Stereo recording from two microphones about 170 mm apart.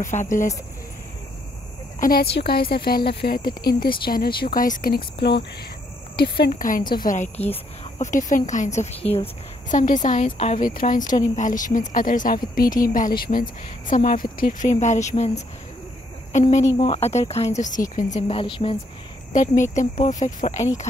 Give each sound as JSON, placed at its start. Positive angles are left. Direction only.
{"t": 0.0, "sound": "a woman's voice", "side_deg": 50}
{"t": 2.0, "sound": "a woman's voice", "side_deg": 55}
{"t": 6.5, "sound": "a woman's voice", "side_deg": 50}
{"t": 12.6, "sound": "speech", "side_deg": 20}
{"t": 12.9, "sound": "a woman's voice", "side_deg": 55}
{"t": 18.3, "sound": "speech", "side_deg": 30}
{"t": 19.3, "sound": "a woman's voice", "side_deg": 50}